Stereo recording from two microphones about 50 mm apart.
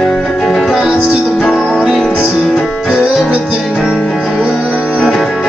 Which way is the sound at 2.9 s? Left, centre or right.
Centre.